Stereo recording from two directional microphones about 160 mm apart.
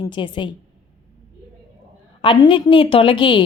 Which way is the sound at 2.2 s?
35° left (ahead or behind).